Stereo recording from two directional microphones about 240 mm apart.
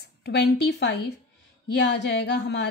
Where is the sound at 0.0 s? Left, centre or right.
Left.